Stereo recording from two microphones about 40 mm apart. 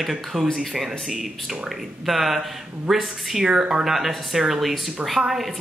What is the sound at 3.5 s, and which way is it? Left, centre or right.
Speech, right.